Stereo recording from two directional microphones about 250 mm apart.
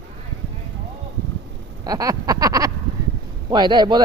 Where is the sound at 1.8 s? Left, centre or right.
Centre.